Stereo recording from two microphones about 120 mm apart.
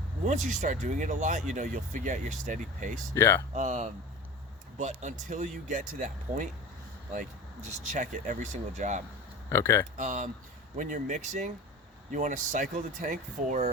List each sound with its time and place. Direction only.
0.3 s speech: 90° right
3.2 s speech: 20° left (ahead or behind)
3.5 s speech: 85° right
7.7 s speech: 90° right
9.5 s speech: 25° left (ahead or behind)
10.0 s speech: 90° right
12.1 s speech: 90° right